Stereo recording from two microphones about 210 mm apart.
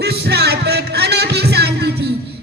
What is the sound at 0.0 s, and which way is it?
Music, 50° right (ahead or behind).